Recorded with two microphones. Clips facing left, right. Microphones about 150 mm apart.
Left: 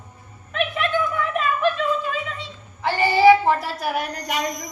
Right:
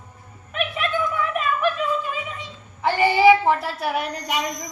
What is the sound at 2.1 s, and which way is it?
A woman's voice, 15° right (ahead or behind).